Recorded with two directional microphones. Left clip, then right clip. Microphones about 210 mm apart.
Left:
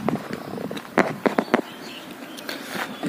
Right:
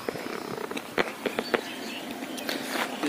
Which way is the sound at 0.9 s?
85° left.